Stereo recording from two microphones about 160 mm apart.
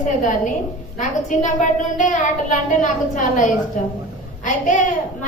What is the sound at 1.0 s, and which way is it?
A woman's voice, 50° left (ahead or behind).